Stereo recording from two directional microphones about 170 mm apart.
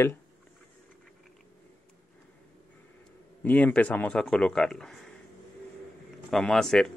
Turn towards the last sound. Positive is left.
turn(degrees=0)  # may be behind; listen again after turning